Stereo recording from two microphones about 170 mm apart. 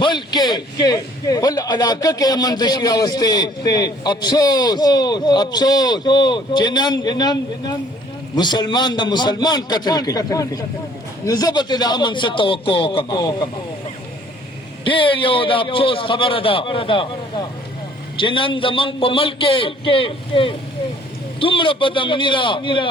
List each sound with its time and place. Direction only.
0.0 s a man's voice: 25° left (ahead or behind)
14.8 s a man's voice: 30° left (ahead or behind)